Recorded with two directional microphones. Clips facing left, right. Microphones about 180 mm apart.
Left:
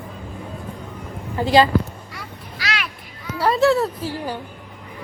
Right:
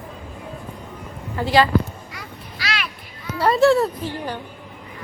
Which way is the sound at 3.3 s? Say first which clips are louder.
Right 1 dB; centre (ahead or behind).